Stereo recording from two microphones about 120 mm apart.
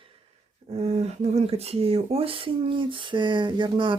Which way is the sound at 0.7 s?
60° right (ahead or behind).